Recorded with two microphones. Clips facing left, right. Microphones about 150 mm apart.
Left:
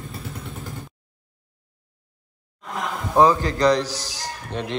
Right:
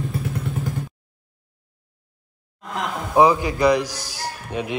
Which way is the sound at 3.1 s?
10° right (ahead or behind).